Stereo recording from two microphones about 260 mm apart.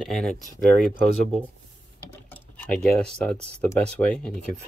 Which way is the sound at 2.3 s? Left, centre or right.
Centre.